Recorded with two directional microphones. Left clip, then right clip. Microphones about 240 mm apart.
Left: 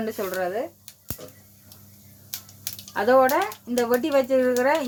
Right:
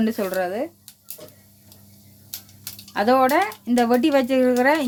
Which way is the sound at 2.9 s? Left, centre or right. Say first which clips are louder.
Right 1 dB; right.